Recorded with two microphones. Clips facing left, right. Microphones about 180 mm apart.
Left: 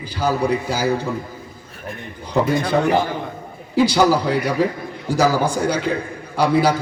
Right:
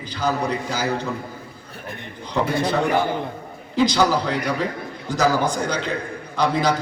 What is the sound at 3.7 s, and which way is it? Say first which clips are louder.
A man's voice: left 3 dB; 10° left (ahead or behind).